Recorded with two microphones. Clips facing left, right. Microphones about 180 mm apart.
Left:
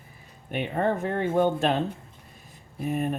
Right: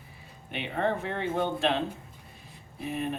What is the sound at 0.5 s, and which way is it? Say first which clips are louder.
Speech: left 3 dB; 45° left (ahead or behind).